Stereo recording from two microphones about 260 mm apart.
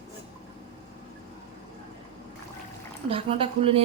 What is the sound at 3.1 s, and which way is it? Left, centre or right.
Speech, right.